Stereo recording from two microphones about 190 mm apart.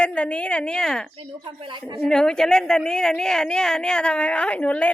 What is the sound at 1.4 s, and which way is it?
Speech, 25° right (ahead or behind).